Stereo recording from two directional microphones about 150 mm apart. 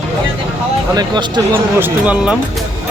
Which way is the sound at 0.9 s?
30° right (ahead or behind).